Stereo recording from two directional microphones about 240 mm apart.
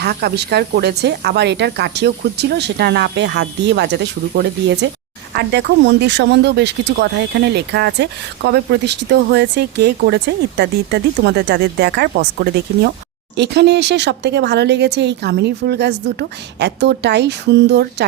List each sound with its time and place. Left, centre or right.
0.0 s speech: right